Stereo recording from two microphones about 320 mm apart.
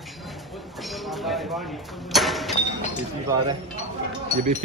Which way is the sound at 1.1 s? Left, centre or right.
Centre.